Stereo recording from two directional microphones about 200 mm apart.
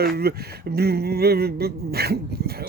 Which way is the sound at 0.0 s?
50° right (ahead or behind).